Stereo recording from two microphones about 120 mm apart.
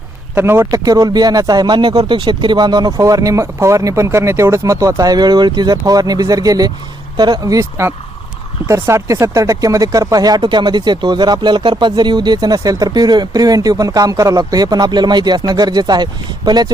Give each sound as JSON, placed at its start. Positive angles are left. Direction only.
{"t": 0.3, "sound": "speech", "side_deg": -20}